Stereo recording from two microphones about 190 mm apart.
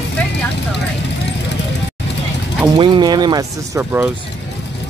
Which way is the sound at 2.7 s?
25° right (ahead or behind).